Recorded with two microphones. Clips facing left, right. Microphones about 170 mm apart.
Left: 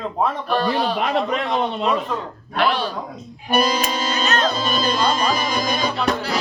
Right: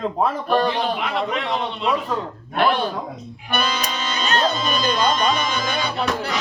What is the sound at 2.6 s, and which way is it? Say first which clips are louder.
Speech: right 1 dB; 50° right (ahead or behind).